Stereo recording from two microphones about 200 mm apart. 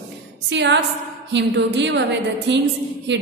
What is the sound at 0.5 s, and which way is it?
A woman's voice, 60° right (ahead or behind).